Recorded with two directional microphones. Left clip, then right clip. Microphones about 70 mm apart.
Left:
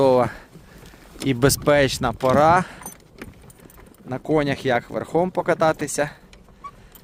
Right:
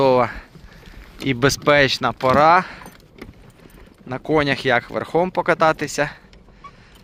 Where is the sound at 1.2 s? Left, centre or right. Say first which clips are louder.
Right 1 dB; left.